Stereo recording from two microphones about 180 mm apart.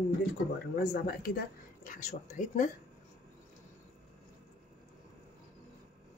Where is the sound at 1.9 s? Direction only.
45° left (ahead or behind).